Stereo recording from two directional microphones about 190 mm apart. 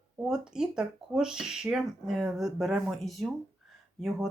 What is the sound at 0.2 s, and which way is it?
Speech, 5° right (ahead or behind).